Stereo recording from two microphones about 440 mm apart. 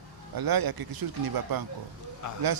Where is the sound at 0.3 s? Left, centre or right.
Right.